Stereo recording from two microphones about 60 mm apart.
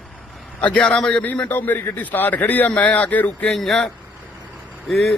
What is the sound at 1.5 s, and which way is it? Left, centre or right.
A man's voice, left.